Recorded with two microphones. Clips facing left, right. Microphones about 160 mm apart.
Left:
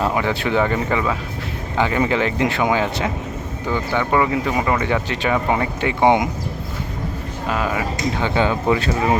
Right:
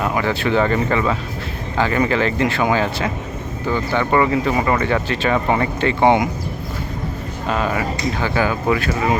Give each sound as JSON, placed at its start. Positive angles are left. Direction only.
{"t": 0.0, "sound": "speech", "side_deg": 20}
{"t": 3.9, "sound": "speech", "side_deg": 5}
{"t": 7.5, "sound": "speech", "side_deg": 10}
{"t": 8.2, "sound": "speech", "side_deg": 25}